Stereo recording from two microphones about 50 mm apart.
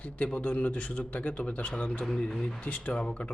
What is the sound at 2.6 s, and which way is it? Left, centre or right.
Speech, left.